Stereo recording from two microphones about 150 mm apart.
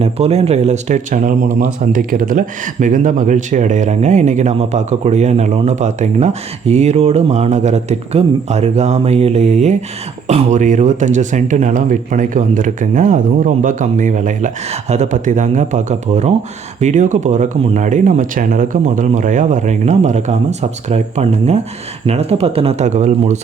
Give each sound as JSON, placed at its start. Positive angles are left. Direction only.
{"t": 0.0, "sound": "speech", "side_deg": -45}